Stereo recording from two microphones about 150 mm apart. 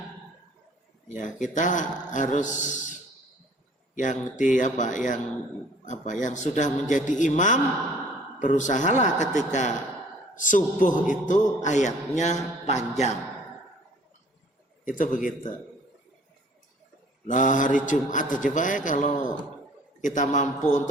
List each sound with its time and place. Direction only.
1.0 s a man's voice: 55° left (ahead or behind)
3.9 s a man's voice: 55° left (ahead or behind)
14.8 s a man's voice: 60° left (ahead or behind)
17.2 s a man's voice: 60° left (ahead or behind)